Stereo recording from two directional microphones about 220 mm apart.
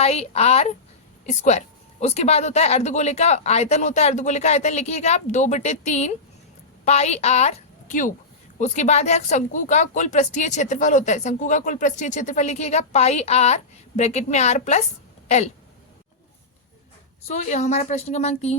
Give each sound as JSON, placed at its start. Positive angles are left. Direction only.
{"t": 0.0, "sound": "a woman's voice", "side_deg": 30}
{"t": 17.2, "sound": "speech", "side_deg": 30}